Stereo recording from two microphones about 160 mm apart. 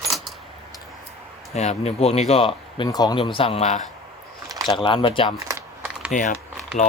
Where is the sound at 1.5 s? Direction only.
45° left (ahead or behind).